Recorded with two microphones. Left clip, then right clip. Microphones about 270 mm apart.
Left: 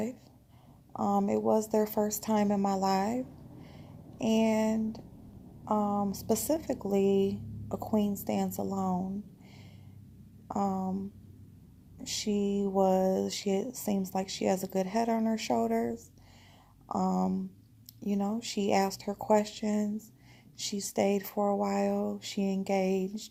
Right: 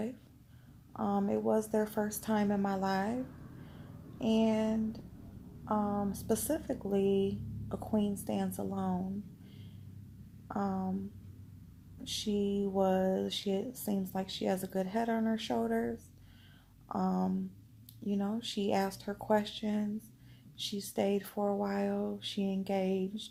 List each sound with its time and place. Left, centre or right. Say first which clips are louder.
0.9 s speech: left 4 dB; left
4.2 s speech: left 3 dB; left
10.5 s speech: left 4 dB; left
12.0 s speech: left 2 dB; left
18.0 s speech: left 3 dB; left